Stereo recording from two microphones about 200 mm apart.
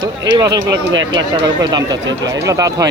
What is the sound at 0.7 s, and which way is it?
Speech, 70° right (ahead or behind).